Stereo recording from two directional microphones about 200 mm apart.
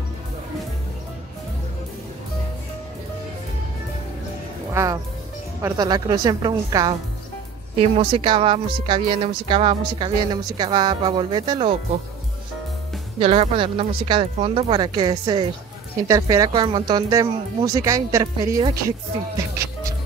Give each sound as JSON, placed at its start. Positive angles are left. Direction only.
{"t": 4.7, "sound": "speech", "side_deg": -15}
{"t": 13.2, "sound": "speech", "side_deg": -30}